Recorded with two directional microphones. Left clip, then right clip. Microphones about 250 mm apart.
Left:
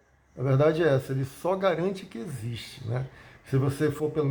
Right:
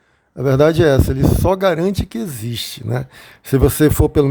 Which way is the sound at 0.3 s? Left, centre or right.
Right.